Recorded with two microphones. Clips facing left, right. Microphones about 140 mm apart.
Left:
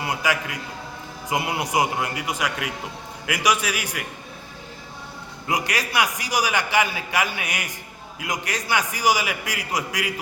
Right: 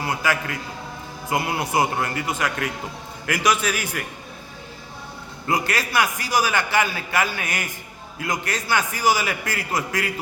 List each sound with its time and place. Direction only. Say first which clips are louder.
0.0 s a man's voice: right 1 dB; 20° left (ahead or behind)
5.5 s a man's voice: right 2 dB; 15° left (ahead or behind)